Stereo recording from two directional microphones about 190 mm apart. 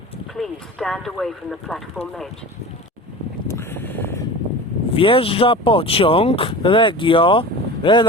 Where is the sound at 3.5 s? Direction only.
15° left (ahead or behind).